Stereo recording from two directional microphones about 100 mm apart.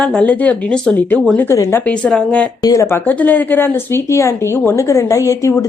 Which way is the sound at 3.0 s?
15° left (ahead or behind).